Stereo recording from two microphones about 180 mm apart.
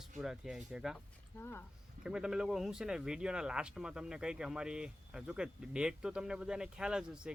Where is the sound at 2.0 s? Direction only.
5° right (ahead or behind).